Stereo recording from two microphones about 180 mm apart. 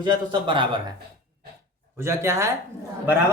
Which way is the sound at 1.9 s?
15° right (ahead or behind).